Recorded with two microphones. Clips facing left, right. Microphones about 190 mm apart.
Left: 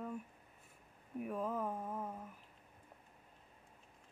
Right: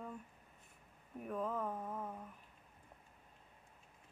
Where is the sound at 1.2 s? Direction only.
10° left (ahead or behind).